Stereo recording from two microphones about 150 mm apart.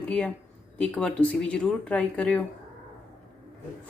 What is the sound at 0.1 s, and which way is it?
Speech, 5° left (ahead or behind).